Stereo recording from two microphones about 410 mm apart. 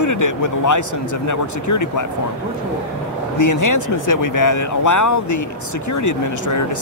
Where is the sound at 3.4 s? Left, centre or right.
Left.